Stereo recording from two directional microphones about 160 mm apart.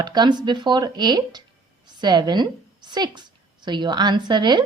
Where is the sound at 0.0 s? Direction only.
25° right (ahead or behind).